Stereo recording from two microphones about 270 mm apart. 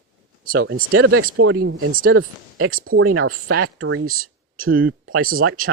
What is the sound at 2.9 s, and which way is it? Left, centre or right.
Speech, right.